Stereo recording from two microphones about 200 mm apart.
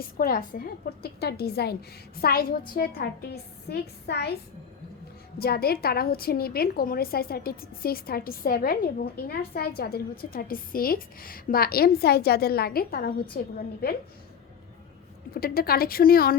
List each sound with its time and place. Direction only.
0.0 s a woman's voice: 45° left (ahead or behind)
5.4 s a woman's voice: 50° left (ahead or behind)
15.4 s a woman's voice: 50° left (ahead or behind)